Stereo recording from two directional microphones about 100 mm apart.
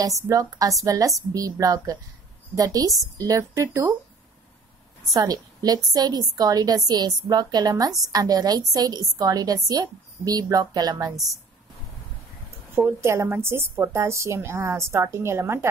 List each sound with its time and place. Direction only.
0.0 s a woman's voice: 35° right (ahead or behind)
5.1 s a woman's voice: 40° right (ahead or behind)
12.7 s a woman's voice: 25° right (ahead or behind)